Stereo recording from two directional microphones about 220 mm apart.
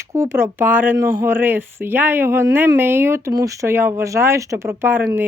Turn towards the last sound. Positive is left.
turn(degrees=-10)  # may be behind; listen again after turning